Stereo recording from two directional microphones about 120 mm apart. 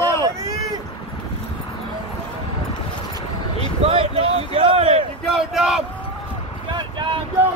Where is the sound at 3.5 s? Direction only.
55° right (ahead or behind).